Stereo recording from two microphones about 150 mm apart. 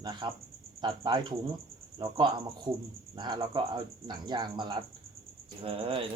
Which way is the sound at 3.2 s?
30° right (ahead or behind).